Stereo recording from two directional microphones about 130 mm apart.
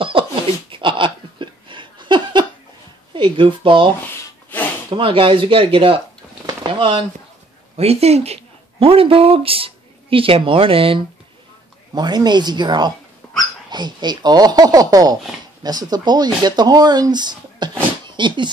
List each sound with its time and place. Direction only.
0.2 s a sound: 45° right (ahead or behind)
3.2 s speech: 40° right (ahead or behind)
4.9 s speech: 40° right (ahead or behind)
6.4 s a sound: 40° right (ahead or behind)
7.7 s speech: 50° right (ahead or behind)
11.9 s speech: 30° right (ahead or behind)
13.2 s dog: 5° left (ahead or behind)
13.7 s speech: 35° right (ahead or behind)
18.0 s a sound: 35° right (ahead or behind)